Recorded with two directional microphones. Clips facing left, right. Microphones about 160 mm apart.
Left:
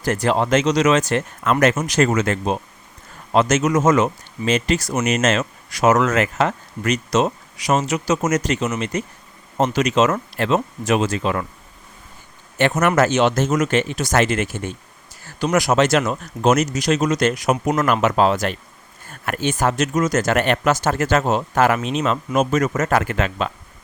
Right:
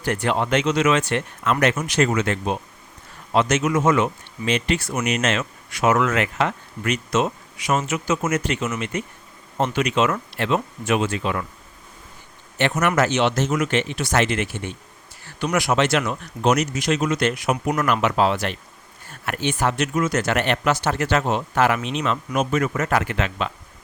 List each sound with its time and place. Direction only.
0.0 s speech: 40° left (ahead or behind)
12.5 s speech: 45° left (ahead or behind)